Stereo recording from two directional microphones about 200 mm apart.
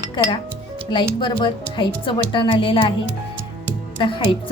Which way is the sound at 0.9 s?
25° left (ahead or behind).